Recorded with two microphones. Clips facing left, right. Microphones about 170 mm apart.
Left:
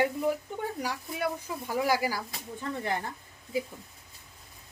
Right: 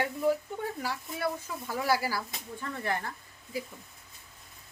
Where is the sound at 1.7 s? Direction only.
15° left (ahead or behind).